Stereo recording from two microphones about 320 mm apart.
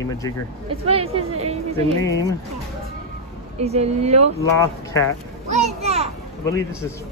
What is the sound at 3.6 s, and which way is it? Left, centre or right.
Speech, centre.